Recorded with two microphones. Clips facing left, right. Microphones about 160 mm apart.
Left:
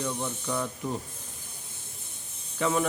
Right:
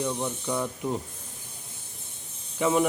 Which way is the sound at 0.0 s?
15° right (ahead or behind).